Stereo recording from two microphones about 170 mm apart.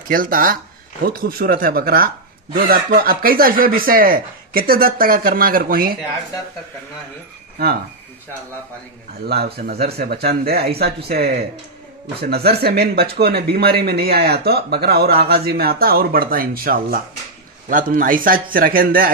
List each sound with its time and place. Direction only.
0.1 s speech: 55° right (ahead or behind)
9.3 s speech: 65° right (ahead or behind)